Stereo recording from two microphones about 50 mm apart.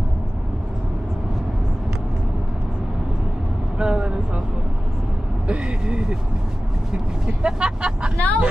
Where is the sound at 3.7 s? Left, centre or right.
Centre.